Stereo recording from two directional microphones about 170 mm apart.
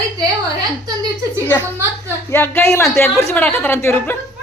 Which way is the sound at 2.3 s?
10° left (ahead or behind).